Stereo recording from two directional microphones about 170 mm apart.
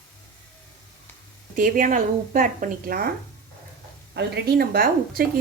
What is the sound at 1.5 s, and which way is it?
Speech, 50° right (ahead or behind).